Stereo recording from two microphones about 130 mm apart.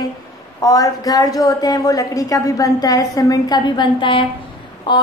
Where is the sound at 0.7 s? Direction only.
25° left (ahead or behind).